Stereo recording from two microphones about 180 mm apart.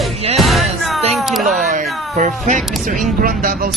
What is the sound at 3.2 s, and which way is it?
Speech, 50° right (ahead or behind).